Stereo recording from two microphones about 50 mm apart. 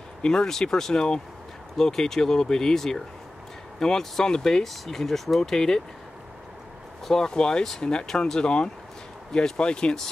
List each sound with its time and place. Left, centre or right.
0.2 s speech: centre
7.1 s speech: centre